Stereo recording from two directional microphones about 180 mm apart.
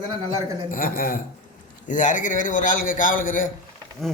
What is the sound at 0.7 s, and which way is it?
A man's voice, 50° left (ahead or behind).